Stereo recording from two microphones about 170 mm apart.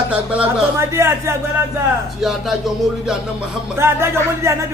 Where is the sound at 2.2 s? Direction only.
Centre (ahead or behind).